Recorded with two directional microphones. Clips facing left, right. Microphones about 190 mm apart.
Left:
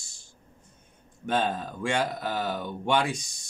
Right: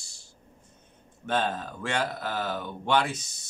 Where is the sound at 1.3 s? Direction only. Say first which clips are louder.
Left 1 dB; 15° left (ahead or behind).